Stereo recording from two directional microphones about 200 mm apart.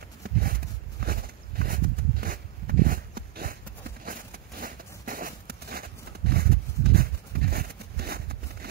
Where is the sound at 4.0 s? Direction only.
45° right (ahead or behind).